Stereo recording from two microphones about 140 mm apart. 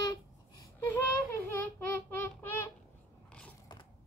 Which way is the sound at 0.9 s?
15° left (ahead or behind).